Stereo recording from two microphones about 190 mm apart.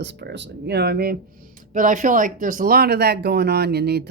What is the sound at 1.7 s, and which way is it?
A woman's voice, 45° right (ahead or behind).